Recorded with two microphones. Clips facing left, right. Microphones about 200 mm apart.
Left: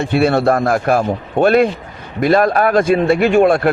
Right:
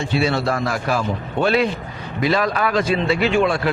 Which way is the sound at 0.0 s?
55° left (ahead or behind).